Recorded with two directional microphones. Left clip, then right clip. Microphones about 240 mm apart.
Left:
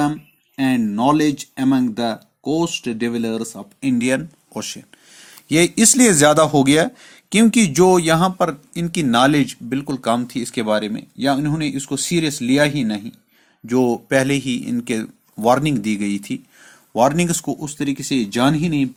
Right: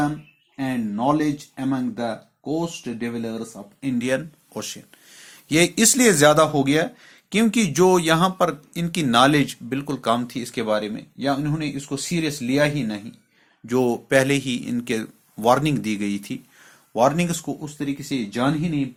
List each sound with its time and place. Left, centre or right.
0.5 s speech: left